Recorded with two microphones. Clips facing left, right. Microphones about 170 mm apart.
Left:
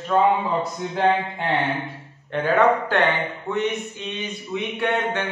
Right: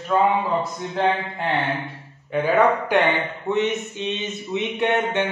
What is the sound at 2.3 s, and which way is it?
A man's voice, 10° right (ahead or behind).